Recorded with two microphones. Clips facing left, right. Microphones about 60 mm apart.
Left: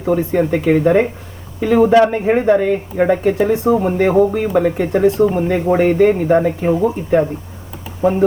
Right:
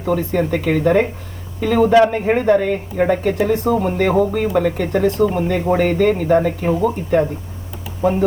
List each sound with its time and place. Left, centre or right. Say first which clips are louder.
0.0 s speech: left 3 dB; centre